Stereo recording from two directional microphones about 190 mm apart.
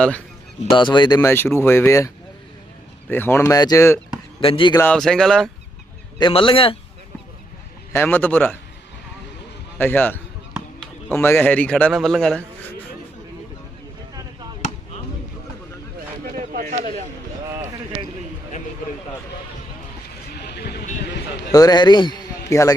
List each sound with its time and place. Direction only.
0.6 s speech: 25° left (ahead or behind)
3.1 s speech: 10° left (ahead or behind)
4.4 s speech: 30° left (ahead or behind)
4.8 s speech: 5° left (ahead or behind)
6.1 s a man's voice: 25° left (ahead or behind)
7.9 s speech: 10° left (ahead or behind)
9.7 s speech: 10° left (ahead or behind)
16.6 s a sound: 45° right (ahead or behind)
20.3 s a sound: 60° left (ahead or behind)
21.5 s a man's voice: 20° left (ahead or behind)